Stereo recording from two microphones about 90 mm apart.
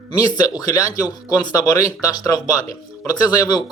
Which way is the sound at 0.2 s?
45° left (ahead or behind).